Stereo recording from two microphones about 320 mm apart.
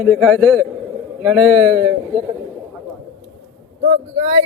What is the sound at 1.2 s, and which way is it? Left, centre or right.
Speech, centre.